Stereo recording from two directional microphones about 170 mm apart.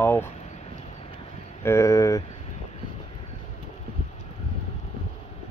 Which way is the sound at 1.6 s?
15° left (ahead or behind).